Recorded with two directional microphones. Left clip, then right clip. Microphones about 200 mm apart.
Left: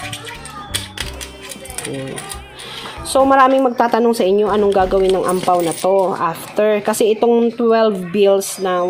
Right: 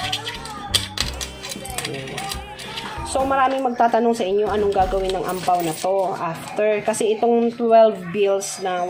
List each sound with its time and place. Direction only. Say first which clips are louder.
3.1 s a woman's voice: left 8 dB; 50° left (ahead or behind)